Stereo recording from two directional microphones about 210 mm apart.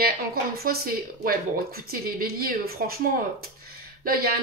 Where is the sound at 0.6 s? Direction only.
45° right (ahead or behind).